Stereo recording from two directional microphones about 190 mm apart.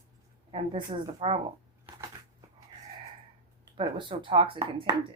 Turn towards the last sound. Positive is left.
turn(degrees=-25)  # may be behind; listen again after turning